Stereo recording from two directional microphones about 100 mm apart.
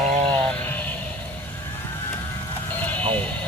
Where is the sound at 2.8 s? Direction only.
15° left (ahead or behind).